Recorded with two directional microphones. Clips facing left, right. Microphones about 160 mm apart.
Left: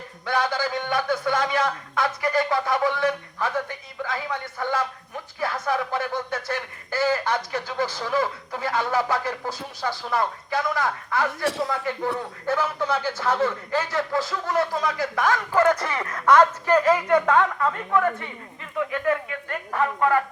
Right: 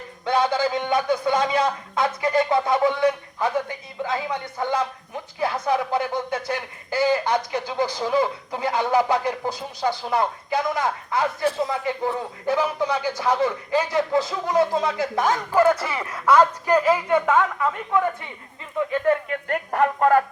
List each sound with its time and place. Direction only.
0.3 s a man's voice: 20° right (ahead or behind)
15.5 s a man's voice: 5° right (ahead or behind)
18.9 s speech: 30° right (ahead or behind)
19.3 s speech: 50° right (ahead or behind)